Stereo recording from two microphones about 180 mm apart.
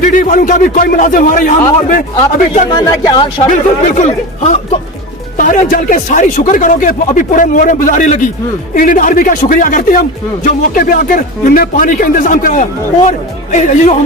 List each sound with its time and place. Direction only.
0.0 s speech: 45° left (ahead or behind)
2.6 s speech: 20° left (ahead or behind)
3.5 s speech: 40° left (ahead or behind)